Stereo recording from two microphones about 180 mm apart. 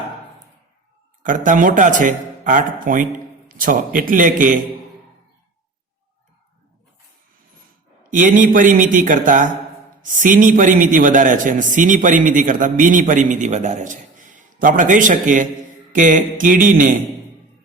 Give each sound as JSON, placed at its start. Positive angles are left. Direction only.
{"t": 1.2, "sound": "a man's voice", "side_deg": -45}
{"t": 8.1, "sound": "a man's voice", "side_deg": -45}